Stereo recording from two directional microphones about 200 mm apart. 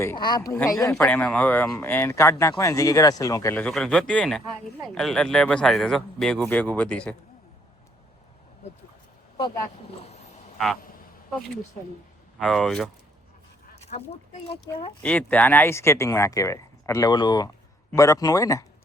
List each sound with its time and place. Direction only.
0.0 s speech: 15° left (ahead or behind)
10.0 s a sound: 35° left (ahead or behind)
12.4 s speech: centre (ahead or behind)
13.8 s speech: 30° left (ahead or behind)
15.0 s speech: 5° left (ahead or behind)